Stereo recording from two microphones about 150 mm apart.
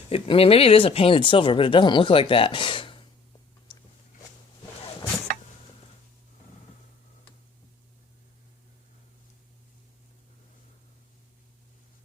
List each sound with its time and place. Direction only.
0.1 s speech: 40° left (ahead or behind)